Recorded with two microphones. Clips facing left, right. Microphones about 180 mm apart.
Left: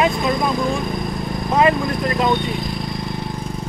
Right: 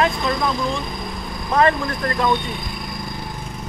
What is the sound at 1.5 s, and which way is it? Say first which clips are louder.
Speech: left 1 dB; 15° left (ahead or behind).